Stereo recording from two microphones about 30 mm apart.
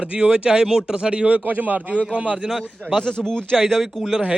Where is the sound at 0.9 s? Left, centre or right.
Right.